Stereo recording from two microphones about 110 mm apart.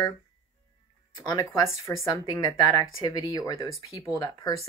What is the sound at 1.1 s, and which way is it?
Speech, 40° left (ahead or behind).